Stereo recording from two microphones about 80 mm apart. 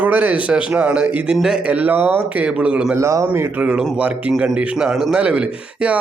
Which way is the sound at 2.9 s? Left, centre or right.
Right.